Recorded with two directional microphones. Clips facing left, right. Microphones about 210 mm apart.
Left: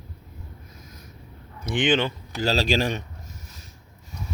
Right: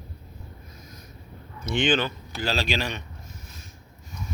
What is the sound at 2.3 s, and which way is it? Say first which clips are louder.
Speech: left 5 dB; 40° left (ahead or behind).